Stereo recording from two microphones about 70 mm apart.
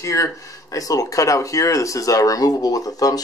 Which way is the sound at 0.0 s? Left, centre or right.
Left.